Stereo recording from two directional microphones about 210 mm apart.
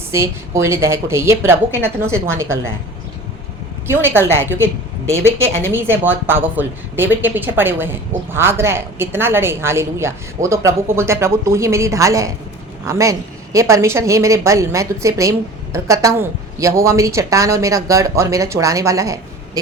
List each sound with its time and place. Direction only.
0.1 s a woman's voice: 15° right (ahead or behind)
3.8 s a woman's voice: 10° right (ahead or behind)